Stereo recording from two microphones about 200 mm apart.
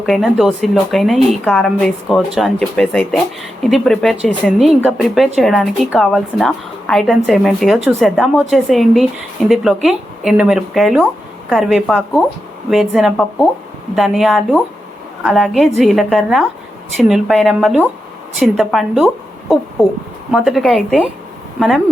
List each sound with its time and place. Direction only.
0.0 s a woman's voice: centre (ahead or behind)